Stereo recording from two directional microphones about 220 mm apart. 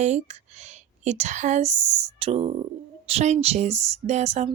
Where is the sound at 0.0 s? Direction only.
30° right (ahead or behind).